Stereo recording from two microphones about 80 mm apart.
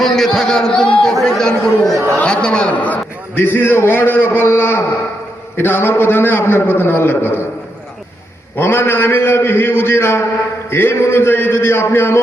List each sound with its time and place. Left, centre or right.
0.0 s a man's voice: centre; by 7.4 s left
8.5 s a man's voice: left